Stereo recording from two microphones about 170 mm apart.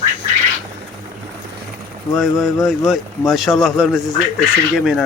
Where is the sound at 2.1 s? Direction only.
Centre (ahead or behind).